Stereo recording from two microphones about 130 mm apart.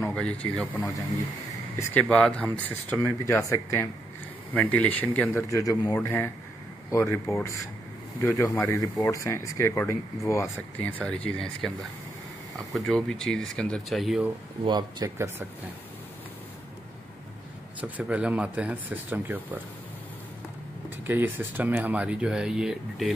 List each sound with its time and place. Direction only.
0.1 s speech: 10° left (ahead or behind)
2.0 s speech: 10° left (ahead or behind)
5.5 s speech: 25° left (ahead or behind)
5.9 s speech: 15° left (ahead or behind); by 14.2 s centre (ahead or behind)
14.6 s speech: 35° right (ahead or behind)
15.0 s speech: 20° right (ahead or behind)
17.7 s speech: 10° right (ahead or behind)
21.1 s speech: 15° right (ahead or behind)